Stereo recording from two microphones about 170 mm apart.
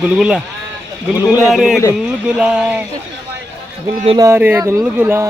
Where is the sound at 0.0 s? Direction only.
5° right (ahead or behind).